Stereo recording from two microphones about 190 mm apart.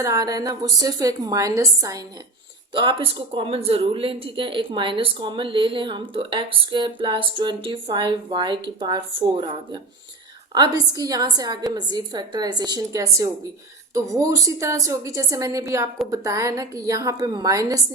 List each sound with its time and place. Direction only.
0.0 s a woman's voice: 15° right (ahead or behind)